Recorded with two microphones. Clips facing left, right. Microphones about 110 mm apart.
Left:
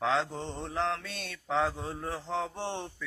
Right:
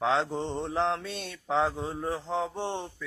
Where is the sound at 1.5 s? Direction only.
20° right (ahead or behind).